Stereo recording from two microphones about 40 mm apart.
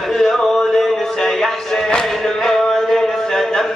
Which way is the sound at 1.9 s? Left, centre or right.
Centre.